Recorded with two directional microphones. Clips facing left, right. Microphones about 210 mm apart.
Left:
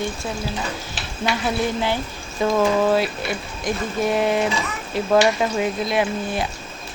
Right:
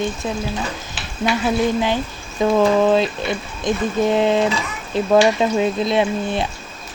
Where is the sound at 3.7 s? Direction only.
20° right (ahead or behind).